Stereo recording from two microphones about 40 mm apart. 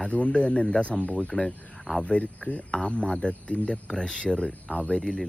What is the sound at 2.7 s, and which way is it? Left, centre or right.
Speech, left.